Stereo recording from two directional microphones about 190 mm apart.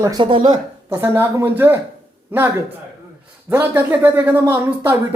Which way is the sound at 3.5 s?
10° right (ahead or behind).